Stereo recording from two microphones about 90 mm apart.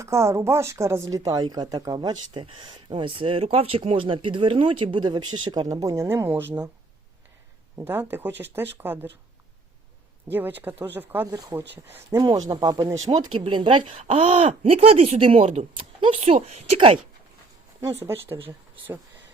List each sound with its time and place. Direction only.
0.0 s speech: 30° right (ahead or behind)
7.8 s speech: 25° right (ahead or behind)
10.3 s speech: 20° right (ahead or behind)
11.3 s speech: 40° right (ahead or behind)
11.5 s speech: 25° right (ahead or behind)
12.2 s speech: 50° right (ahead or behind)
13.4 s speech: 65° right (ahead or behind); by 16.2 s 80° right
17.7 s speech: 35° right (ahead or behind)